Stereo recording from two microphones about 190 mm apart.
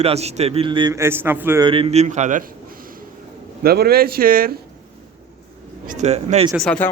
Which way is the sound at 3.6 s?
55° right (ahead or behind).